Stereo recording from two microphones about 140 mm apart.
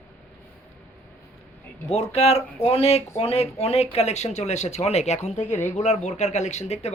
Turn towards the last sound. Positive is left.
turn(degrees=55)  # may be behind; listen again after turning